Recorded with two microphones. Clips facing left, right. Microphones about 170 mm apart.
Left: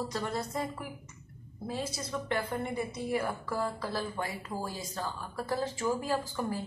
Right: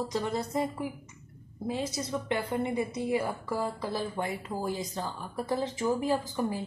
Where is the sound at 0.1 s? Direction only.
15° right (ahead or behind).